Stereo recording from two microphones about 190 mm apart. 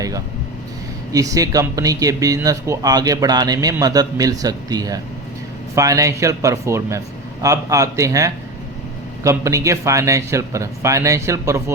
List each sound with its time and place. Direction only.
1.1 s a man's voice: 15° right (ahead or behind)